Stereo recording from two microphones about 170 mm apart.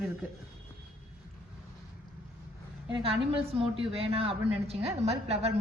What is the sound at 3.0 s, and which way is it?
A woman's voice, 35° right (ahead or behind).